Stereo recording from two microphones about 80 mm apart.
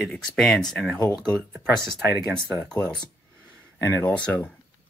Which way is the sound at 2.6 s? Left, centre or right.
Left.